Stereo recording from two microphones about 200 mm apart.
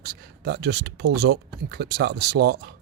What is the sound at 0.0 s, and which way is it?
Speech, 55° right (ahead or behind).